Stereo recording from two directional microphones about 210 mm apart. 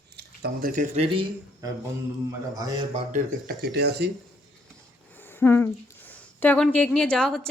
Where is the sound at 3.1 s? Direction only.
45° right (ahead or behind).